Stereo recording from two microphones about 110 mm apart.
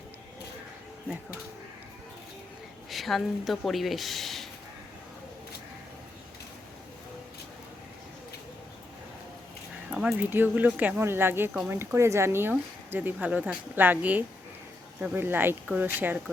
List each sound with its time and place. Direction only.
2.9 s speech: centre (ahead or behind)
9.9 s speech: 10° right (ahead or behind)